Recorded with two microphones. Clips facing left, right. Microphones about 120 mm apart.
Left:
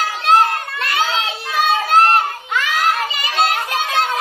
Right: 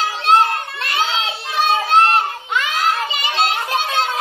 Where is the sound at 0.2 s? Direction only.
30° right (ahead or behind).